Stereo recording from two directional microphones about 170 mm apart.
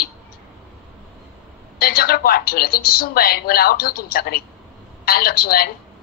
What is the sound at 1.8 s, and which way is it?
A woman's voice, 60° left (ahead or behind).